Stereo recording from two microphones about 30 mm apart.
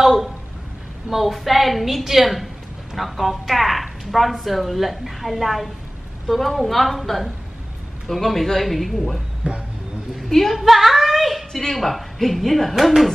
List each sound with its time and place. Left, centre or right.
0.0 s a sound: centre
1.1 s a woman's voice: centre
9.4 s speech: right
10.3 s a woman's voice: centre
10.6 s speech: centre
11.5 s a woman's voice: centre